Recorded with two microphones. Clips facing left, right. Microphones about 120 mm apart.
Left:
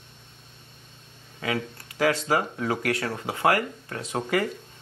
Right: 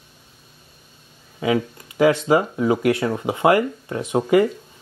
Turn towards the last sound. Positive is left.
turn(degrees=-20)  # may be behind; listen again after turning